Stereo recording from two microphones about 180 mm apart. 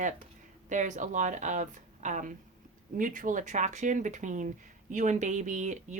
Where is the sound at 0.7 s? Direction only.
45° right (ahead or behind).